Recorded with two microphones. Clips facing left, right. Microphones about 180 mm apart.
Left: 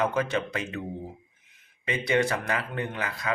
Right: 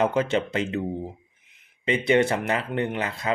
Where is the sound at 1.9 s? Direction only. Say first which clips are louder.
Right 5 dB; 25° right (ahead or behind).